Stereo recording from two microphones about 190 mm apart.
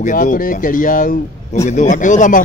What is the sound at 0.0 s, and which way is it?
Speech, 45° left (ahead or behind).